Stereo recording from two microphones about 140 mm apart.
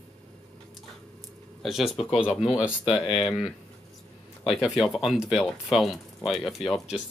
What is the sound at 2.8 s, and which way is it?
Speech, 45° left (ahead or behind).